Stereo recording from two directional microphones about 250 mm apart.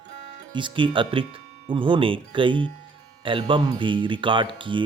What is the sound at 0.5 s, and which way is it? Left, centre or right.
Speech, centre.